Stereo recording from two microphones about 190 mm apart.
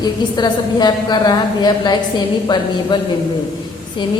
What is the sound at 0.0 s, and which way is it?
A woman's voice, 20° left (ahead or behind).